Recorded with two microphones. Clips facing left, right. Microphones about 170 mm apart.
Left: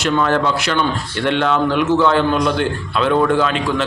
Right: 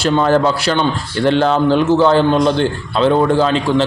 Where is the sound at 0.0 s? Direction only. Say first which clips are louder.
Right 4 dB; 35° right (ahead or behind).